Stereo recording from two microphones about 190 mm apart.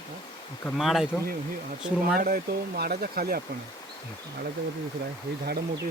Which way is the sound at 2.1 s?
50° right (ahead or behind).